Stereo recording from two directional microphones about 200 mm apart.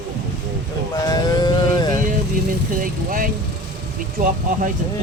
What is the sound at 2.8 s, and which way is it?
Speech, 45° right (ahead or behind).